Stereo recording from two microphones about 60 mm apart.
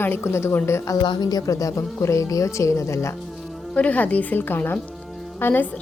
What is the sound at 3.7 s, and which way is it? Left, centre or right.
A woman's voice, left.